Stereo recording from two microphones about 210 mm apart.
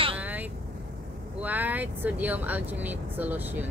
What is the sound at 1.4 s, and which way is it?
Speech, 10° right (ahead or behind).